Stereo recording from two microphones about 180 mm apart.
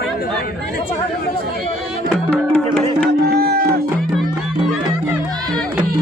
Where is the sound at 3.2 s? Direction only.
60° right (ahead or behind).